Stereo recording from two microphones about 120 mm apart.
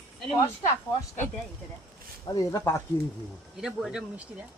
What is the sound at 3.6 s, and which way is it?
Speech, 5° right (ahead or behind).